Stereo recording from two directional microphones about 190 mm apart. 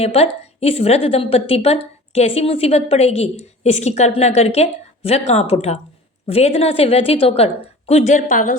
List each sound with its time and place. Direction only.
0.0 s a woman's voice: 35° left (ahead or behind)